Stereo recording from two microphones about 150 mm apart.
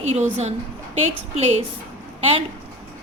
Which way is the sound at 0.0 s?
50° right (ahead or behind).